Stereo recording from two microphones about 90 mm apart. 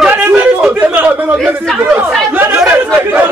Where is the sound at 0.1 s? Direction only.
20° right (ahead or behind).